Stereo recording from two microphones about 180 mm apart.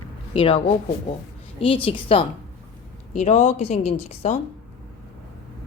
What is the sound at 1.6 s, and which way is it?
A woman's voice, 30° left (ahead or behind).